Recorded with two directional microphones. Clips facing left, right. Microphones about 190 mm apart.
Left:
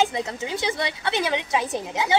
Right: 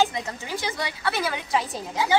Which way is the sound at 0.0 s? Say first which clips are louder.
Left 1 dB; 20° left (ahead or behind).